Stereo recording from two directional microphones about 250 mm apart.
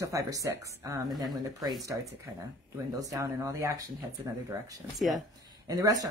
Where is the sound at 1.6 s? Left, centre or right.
Centre.